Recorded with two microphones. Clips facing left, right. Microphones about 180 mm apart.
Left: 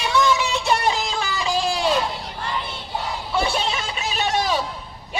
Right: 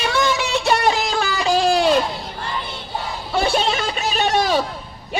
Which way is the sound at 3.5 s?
65° right (ahead or behind).